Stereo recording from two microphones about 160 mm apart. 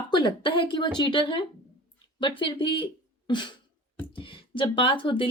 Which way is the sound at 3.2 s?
30° left (ahead or behind).